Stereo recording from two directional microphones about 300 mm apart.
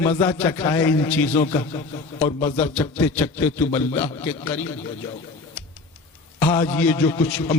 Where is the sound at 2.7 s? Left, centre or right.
Centre.